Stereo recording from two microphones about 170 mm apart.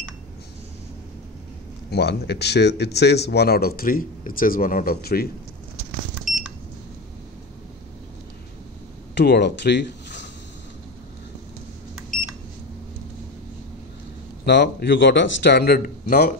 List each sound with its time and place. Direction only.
1.9 s speech: 75° left (ahead or behind)
9.1 s speech: 80° left
14.4 s a man's voice: 80° left; by 16.3 s 55° left (ahead or behind)